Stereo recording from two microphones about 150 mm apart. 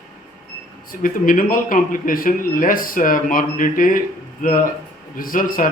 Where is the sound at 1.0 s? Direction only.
65° left (ahead or behind).